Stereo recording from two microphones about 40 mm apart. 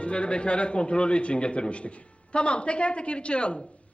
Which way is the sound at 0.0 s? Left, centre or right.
Left.